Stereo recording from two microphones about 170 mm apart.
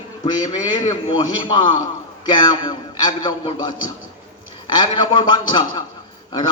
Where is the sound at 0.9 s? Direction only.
30° left (ahead or behind).